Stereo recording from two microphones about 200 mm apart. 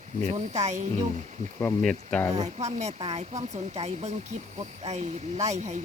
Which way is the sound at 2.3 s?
35° right (ahead or behind).